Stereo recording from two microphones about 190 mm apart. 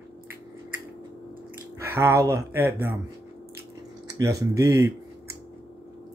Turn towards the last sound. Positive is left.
turn(degrees=-15)  # may be behind; listen again after turning